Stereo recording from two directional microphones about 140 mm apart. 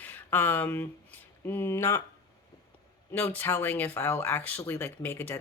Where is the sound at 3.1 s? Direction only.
15° left (ahead or behind).